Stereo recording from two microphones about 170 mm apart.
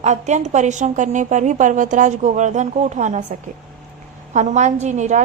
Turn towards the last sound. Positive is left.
turn(degrees=-45)  # may be behind; listen again after turning